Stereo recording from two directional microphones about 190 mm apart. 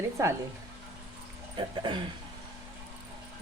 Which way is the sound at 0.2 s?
15° right (ahead or behind).